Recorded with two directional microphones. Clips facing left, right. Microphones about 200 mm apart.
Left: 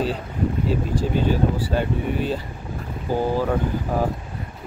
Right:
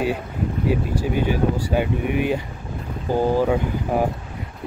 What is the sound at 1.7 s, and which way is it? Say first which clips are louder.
Speech: right 2 dB; 15° right (ahead or behind).